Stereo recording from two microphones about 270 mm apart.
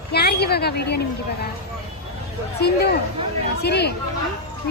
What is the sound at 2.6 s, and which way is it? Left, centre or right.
A woman's voice, left.